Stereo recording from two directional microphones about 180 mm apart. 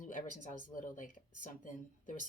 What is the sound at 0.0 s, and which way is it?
Speech, 45° left (ahead or behind).